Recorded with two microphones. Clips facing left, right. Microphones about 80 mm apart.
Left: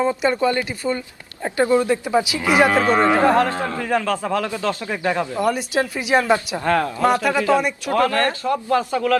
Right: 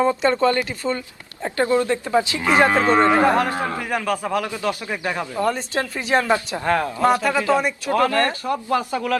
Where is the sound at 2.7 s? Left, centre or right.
Right.